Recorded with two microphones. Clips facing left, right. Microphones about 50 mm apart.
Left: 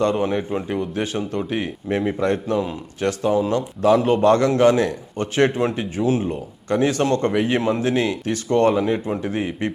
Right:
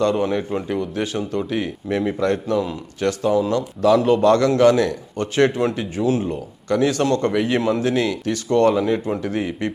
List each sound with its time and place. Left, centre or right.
0.0 s speech: left